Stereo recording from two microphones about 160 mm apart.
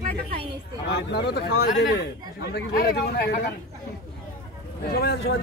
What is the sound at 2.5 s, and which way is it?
Speech, 70° left (ahead or behind).